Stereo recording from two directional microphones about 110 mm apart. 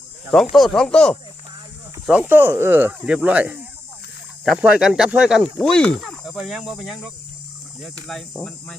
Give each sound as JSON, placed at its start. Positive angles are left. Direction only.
{"t": 0.5, "sound": "speech", "side_deg": 0}
{"t": 2.0, "sound": "speech", "side_deg": -15}
{"t": 5.4, "sound": "speech", "side_deg": 5}